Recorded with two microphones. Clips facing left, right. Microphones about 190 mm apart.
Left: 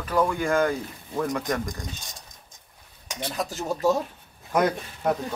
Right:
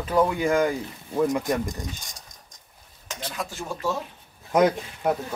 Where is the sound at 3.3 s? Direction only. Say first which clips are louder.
Left 4 dB; 40° left (ahead or behind).